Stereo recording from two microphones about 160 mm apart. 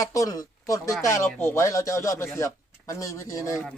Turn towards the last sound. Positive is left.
turn(degrees=20)  # may be behind; listen again after turning